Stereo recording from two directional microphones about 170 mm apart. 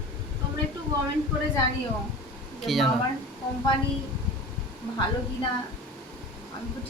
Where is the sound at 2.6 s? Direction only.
Centre (ahead or behind).